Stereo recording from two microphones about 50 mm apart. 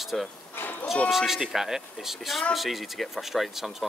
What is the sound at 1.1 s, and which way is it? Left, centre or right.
Speech, centre.